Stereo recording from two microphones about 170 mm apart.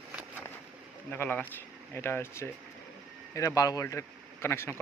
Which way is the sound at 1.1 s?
10° left (ahead or behind).